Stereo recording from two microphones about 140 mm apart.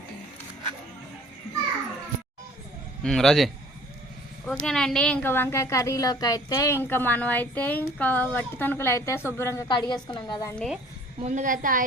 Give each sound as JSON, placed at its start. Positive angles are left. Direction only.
{"t": 3.0, "sound": "a woman's voice", "side_deg": 0}
{"t": 9.6, "sound": "a woman's voice", "side_deg": 35}
{"t": 10.5, "sound": "speech", "side_deg": 5}
{"t": 11.2, "sound": "a woman's voice", "side_deg": -55}